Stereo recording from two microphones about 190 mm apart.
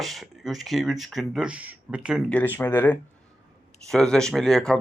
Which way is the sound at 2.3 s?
10° left (ahead or behind).